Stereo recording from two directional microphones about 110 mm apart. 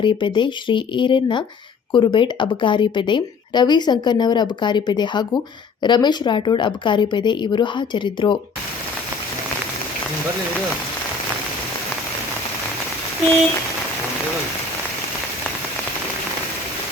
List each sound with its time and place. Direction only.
0.0 s a woman's voice: 45° left (ahead or behind)